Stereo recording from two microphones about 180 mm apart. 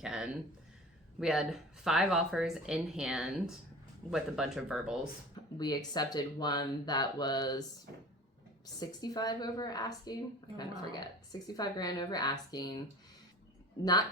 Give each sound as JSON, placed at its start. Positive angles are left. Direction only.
{"t": 0.0, "sound": "speech", "side_deg": -5}
{"t": 5.5, "sound": "a woman's voice", "side_deg": 20}
{"t": 8.8, "sound": "a woman's voice", "side_deg": 20}